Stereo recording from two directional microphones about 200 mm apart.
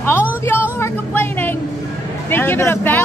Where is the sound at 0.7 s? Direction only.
10° left (ahead or behind).